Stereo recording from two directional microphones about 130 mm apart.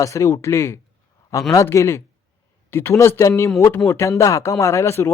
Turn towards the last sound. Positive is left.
turn(degrees=20)  # may be behind; listen again after turning